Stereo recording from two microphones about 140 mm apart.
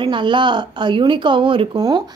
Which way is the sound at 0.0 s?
35° right (ahead or behind).